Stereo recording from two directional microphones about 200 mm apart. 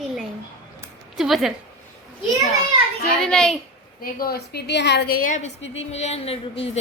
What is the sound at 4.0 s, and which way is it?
A woman's voice, 45° left (ahead or behind).